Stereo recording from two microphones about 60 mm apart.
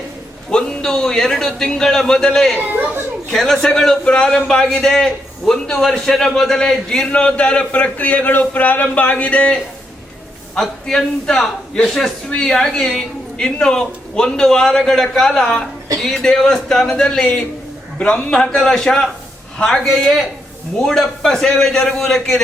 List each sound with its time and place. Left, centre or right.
0.5 s a man's voice: centre
10.5 s a man's voice: centre